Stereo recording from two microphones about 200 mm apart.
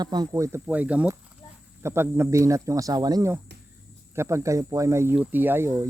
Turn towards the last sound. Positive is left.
turn(degrees=-10)  # may be behind; listen again after turning